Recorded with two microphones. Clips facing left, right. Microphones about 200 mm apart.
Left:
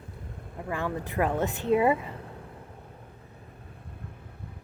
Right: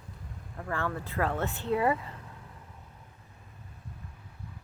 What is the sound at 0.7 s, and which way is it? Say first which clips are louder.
Speech: left 2 dB; 15° left (ahead or behind).